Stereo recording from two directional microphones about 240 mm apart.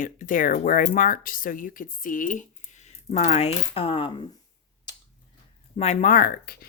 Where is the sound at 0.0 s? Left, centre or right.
Left.